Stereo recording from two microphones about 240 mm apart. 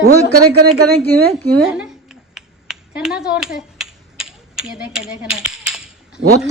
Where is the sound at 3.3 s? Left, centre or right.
Centre.